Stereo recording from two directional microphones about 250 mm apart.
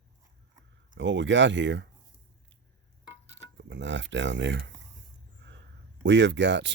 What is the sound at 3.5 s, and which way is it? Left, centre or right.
Speech, right.